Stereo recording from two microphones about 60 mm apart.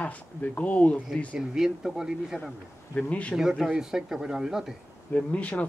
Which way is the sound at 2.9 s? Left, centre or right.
Left.